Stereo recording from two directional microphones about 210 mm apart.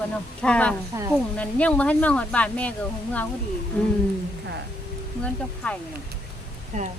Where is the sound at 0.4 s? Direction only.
5° left (ahead or behind).